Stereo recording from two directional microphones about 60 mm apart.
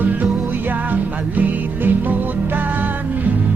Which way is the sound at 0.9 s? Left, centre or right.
Right.